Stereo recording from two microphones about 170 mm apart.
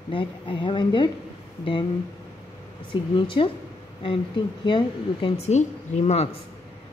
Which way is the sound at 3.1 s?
30° left (ahead or behind).